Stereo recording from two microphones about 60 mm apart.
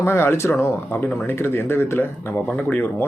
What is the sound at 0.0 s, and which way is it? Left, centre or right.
A man's voice, left.